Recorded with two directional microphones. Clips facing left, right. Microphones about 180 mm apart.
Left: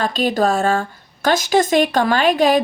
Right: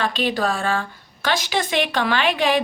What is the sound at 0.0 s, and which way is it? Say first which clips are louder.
A woman's voice: left 4 dB; 40° left (ahead or behind).